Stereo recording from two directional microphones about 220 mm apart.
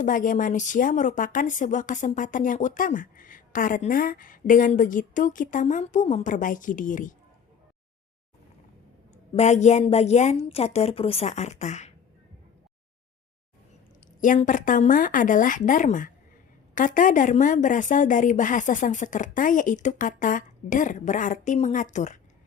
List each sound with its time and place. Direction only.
0.0 s speech: 35° left (ahead or behind)
9.3 s a woman's voice: 30° left (ahead or behind)
14.2 s speech: 35° left (ahead or behind)